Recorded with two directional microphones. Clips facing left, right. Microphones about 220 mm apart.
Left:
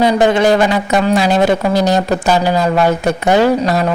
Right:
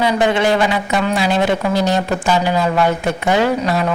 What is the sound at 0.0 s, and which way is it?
Speech, 40° left (ahead or behind).